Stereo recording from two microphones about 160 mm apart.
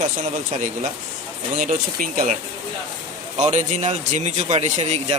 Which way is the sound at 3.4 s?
50° right (ahead or behind).